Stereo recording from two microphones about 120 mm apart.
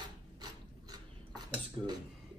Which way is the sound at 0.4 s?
35° right (ahead or behind).